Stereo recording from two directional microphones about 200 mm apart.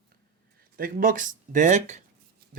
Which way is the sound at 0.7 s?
45° right (ahead or behind).